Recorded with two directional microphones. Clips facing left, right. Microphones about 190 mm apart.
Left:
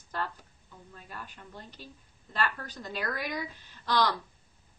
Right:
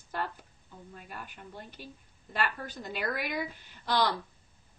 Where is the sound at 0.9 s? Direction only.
10° right (ahead or behind).